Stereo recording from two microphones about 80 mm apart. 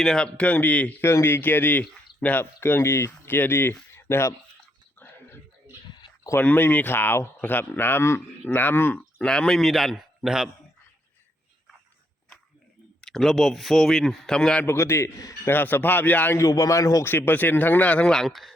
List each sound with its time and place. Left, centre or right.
0.0 s a man's voice: centre
0.3 s speech: centre
1.0 s speech: left
4.9 s a sound: left
6.4 s speech: left
9.1 s a man's voice: centre
13.0 s a man's voice: centre
14.7 s a man's voice: left
16.4 s speech: left
17.1 s speech: left
18.1 s a man's voice: centre